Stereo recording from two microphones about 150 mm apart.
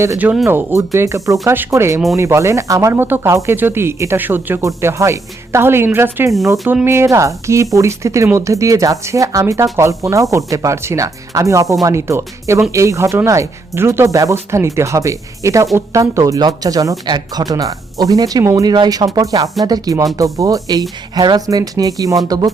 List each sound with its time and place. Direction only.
0.0 s speech: 15° right (ahead or behind)